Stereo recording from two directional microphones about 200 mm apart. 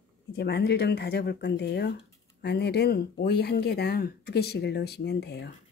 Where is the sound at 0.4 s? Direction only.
55° left (ahead or behind).